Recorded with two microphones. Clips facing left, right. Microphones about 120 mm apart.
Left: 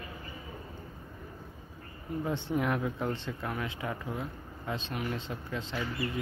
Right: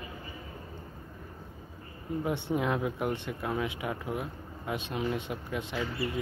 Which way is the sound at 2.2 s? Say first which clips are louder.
Right 1 dB; 15° right (ahead or behind).